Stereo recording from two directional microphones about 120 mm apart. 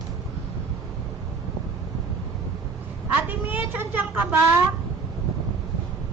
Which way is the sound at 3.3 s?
15° right (ahead or behind).